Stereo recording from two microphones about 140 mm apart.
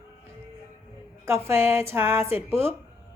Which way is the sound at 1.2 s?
20° right (ahead or behind).